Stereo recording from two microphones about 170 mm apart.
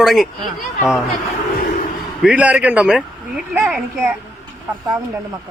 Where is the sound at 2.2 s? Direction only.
10° right (ahead or behind).